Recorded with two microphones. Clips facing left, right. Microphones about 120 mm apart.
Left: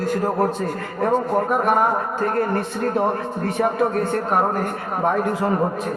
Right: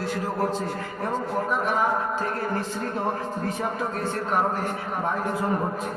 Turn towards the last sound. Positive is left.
turn(degrees=55)  # may be behind; listen again after turning